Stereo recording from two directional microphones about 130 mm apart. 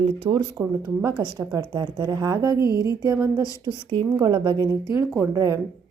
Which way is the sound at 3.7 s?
30° right (ahead or behind).